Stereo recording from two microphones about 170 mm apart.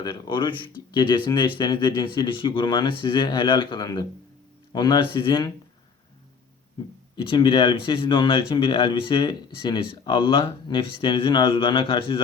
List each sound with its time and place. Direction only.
0.0 s speech: 25° left (ahead or behind)
7.2 s speech: 30° left (ahead or behind)